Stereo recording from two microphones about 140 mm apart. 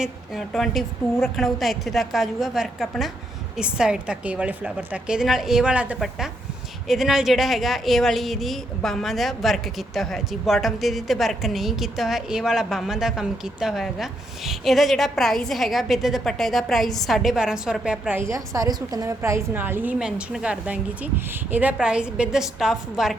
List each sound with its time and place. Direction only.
0.0 s a woman's voice: centre (ahead or behind)
18.3 s a woman's voice: 25° right (ahead or behind); by 23.1 s 5° right (ahead or behind)